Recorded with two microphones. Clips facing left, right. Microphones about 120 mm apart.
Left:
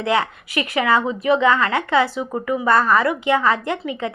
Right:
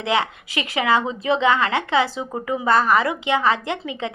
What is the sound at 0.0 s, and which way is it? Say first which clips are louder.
A woman's voice: left 2 dB; 20° right (ahead or behind).